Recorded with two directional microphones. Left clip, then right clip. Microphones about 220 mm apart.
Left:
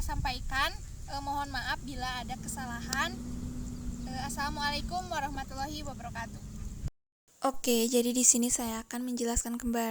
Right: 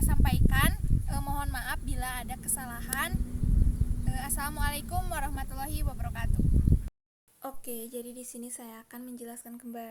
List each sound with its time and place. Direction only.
0.0 s a sound: 10° right (ahead or behind)
1.1 s speech: 10° right (ahead or behind)
7.4 s a woman's voice: 40° left (ahead or behind)
9.1 s speech: 40° left (ahead or behind)